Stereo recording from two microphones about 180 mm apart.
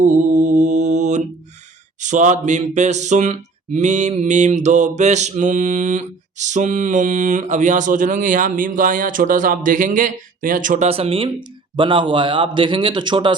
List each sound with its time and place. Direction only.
0.0 s mantra: 40° right (ahead or behind)
2.0 s speech: 45° right (ahead or behind); by 13.3 s 25° right (ahead or behind)